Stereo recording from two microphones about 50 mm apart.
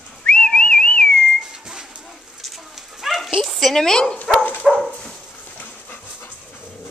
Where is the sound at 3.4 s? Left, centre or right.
Centre.